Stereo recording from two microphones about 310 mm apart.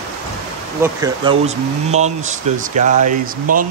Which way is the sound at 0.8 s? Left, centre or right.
Centre.